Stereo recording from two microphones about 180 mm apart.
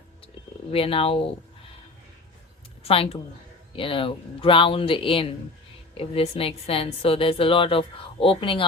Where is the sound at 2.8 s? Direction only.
30° left (ahead or behind).